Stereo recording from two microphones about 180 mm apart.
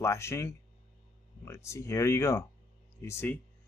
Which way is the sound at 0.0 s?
15° left (ahead or behind).